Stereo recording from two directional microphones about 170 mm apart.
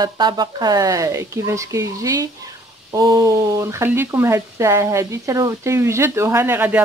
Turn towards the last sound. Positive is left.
turn(degrees=-10)  # may be behind; listen again after turning